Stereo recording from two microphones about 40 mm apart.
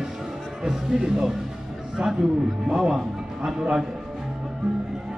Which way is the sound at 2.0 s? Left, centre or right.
Right.